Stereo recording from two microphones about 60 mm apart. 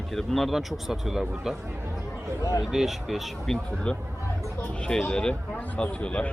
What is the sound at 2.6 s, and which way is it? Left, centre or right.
Speech, centre.